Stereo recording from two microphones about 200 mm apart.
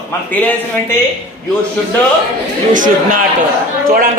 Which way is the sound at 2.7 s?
40° right (ahead or behind).